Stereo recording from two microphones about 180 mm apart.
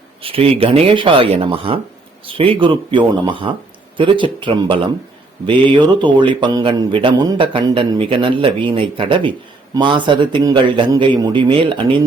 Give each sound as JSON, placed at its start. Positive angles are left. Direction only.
{"t": 0.2, "sound": "speech", "side_deg": -30}